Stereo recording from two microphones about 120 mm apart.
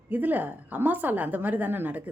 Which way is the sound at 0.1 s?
15° right (ahead or behind).